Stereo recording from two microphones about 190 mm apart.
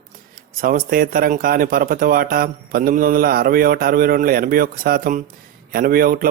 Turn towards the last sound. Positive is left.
turn(degrees=-50)  # may be behind; listen again after turning